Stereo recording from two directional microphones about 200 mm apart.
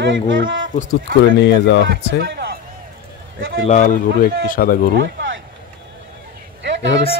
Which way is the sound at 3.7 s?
40° left (ahead or behind).